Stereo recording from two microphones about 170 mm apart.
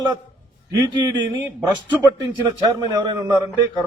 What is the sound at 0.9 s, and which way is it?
Speech, 25° right (ahead or behind).